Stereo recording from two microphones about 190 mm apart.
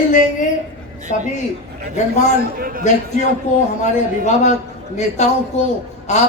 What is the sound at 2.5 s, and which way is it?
Speech, 50° right (ahead or behind).